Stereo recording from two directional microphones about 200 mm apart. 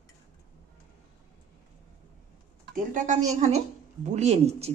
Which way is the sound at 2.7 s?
40° right (ahead or behind).